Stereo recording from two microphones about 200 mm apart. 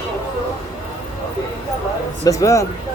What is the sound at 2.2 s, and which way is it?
Speech, 15° left (ahead or behind).